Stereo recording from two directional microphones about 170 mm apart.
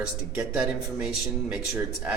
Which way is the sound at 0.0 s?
5° right (ahead or behind).